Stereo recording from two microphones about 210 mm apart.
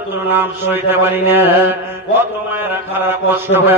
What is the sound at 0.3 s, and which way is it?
Mantra, 10° right (ahead or behind).